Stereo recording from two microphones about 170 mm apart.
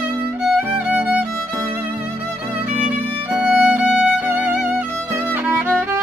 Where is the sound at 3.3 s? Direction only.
5° right (ahead or behind).